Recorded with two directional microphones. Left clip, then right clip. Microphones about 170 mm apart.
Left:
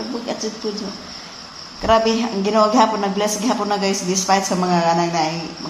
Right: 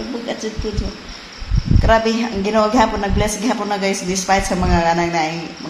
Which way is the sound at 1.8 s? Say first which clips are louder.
Even; 15° right (ahead or behind).